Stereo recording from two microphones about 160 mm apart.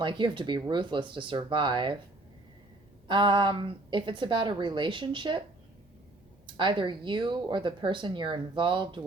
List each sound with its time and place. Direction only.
0.0 s speech: 30° right (ahead or behind)
3.1 s a woman's voice: 30° right (ahead or behind)
6.6 s speech: 30° right (ahead or behind)